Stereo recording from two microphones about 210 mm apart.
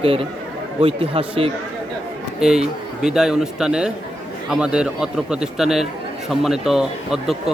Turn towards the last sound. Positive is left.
turn(degrees=0)  # may be behind; listen again after turning